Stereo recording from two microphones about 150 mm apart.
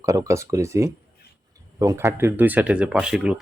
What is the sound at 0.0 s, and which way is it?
Speech, 20° right (ahead or behind).